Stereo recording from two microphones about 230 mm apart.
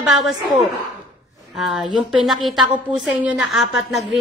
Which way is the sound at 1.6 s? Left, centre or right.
Centre.